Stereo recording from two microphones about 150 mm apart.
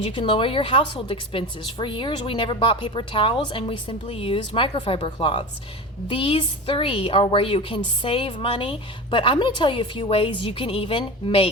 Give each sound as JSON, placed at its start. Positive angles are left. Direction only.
{"t": 0.0, "sound": "a woman's voice", "side_deg": 35}